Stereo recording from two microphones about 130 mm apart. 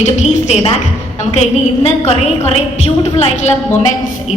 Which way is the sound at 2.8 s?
60° left (ahead or behind).